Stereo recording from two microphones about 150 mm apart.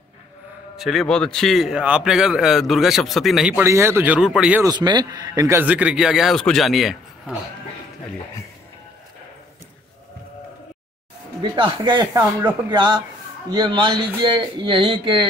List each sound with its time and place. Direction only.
0.7 s a man's voice: centre (ahead or behind)
3.5 s speech: 20° right (ahead or behind)
4.6 s speech: 30° right (ahead or behind); by 7.3 s centre (ahead or behind)
11.5 s speech: 35° right (ahead or behind)
12.1 s speech: 15° right (ahead or behind)
12.6 s speech: 30° right (ahead or behind)